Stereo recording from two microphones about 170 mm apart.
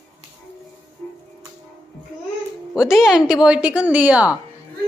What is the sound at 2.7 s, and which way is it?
Speech, 5° right (ahead or behind).